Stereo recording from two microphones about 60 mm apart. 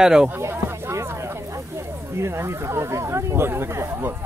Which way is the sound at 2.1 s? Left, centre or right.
Right.